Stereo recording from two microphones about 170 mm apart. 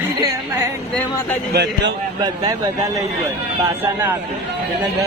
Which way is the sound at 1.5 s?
75° right (ahead or behind).